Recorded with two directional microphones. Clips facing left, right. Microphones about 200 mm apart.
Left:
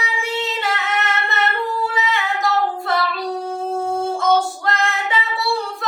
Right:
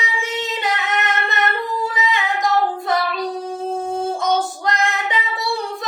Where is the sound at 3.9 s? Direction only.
20° right (ahead or behind).